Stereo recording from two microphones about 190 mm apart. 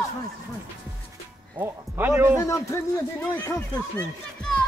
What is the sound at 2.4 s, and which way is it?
Speech, 15° left (ahead or behind).